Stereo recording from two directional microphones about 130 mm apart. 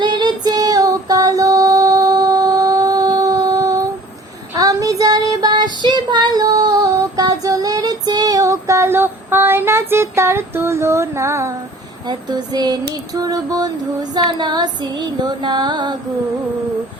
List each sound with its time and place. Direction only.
0.0 s music: 35° right (ahead or behind)
4.5 s child singing: 25° right (ahead or behind)
5.8 s female singing: 35° right (ahead or behind)
12.0 s a sound: 30° right (ahead or behind)